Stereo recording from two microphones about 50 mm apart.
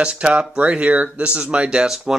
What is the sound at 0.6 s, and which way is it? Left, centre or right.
Speech, right.